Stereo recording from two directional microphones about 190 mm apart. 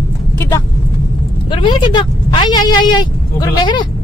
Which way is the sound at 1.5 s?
25° left (ahead or behind).